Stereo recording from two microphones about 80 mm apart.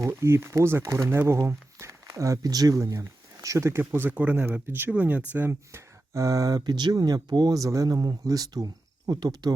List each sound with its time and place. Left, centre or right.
0.2 s speech: right
4.1 s speech: centre; by 9.5 s right